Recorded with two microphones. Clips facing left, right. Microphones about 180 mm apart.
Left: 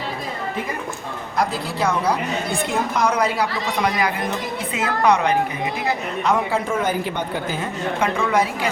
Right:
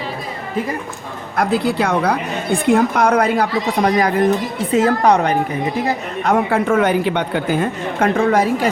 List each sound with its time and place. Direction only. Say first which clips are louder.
1.4 s a man's voice: right 6 dB; 65° right (ahead or behind); by 5.8 s 45° right (ahead or behind)
6.2 s a man's voice: right 5 dB; 55° right (ahead or behind)